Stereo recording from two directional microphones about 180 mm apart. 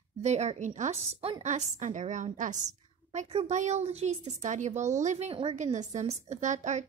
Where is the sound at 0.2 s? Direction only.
40° right (ahead or behind).